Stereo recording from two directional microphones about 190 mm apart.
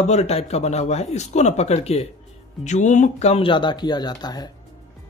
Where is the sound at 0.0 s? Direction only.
35° left (ahead or behind).